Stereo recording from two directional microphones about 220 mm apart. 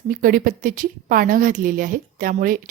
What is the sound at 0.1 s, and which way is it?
A woman's voice, 40° right (ahead or behind).